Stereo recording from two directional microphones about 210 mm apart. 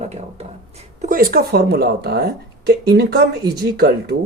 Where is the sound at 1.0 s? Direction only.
40° right (ahead or behind).